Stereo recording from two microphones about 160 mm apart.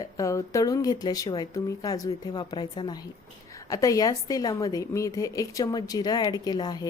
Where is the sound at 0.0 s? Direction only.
20° left (ahead or behind).